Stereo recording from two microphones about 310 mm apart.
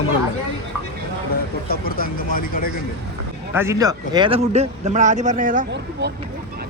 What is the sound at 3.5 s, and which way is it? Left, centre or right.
Speech, centre.